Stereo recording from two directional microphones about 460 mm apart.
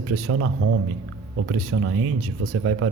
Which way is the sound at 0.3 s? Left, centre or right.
Right.